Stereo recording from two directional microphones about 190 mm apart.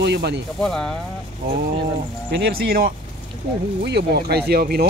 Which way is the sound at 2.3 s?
60° right (ahead or behind).